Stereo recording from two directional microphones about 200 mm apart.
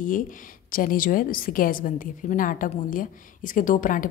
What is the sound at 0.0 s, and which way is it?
A woman's voice, 45° left (ahead or behind).